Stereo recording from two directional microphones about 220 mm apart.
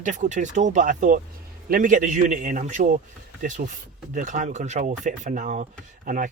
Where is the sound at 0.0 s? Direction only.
35° right (ahead or behind).